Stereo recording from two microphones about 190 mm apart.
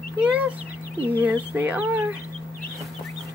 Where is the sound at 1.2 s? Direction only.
10° right (ahead or behind).